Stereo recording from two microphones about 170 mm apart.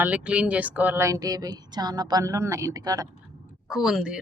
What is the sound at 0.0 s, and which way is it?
Speech, 10° right (ahead or behind).